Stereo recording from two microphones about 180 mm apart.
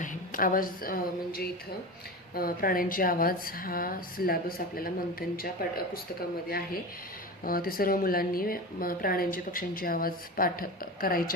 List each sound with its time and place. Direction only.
0.0 s a woman's voice: 50° left (ahead or behind)
7.4 s a woman's voice: 55° left (ahead or behind)